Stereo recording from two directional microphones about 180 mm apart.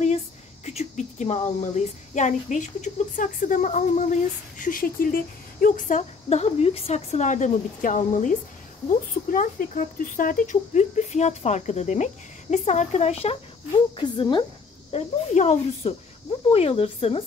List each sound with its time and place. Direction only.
0.7 s a woman's voice: 40° left (ahead or behind)
14.9 s speech: 40° left (ahead or behind)